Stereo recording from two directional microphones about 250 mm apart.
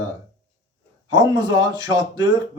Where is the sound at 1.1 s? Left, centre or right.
Centre.